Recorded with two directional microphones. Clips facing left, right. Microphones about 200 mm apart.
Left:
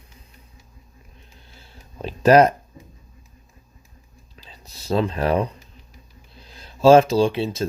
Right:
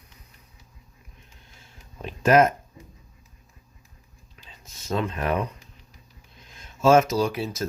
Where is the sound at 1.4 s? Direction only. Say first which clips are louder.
Left 6 dB; 35° left (ahead or behind).